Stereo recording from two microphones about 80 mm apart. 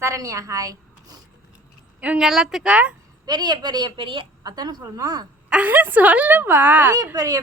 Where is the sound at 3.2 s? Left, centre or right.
Right.